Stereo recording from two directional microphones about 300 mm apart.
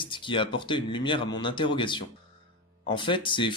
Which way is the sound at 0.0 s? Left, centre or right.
Centre.